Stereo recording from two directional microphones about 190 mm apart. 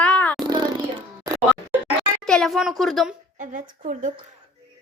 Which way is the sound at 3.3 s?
45° right (ahead or behind).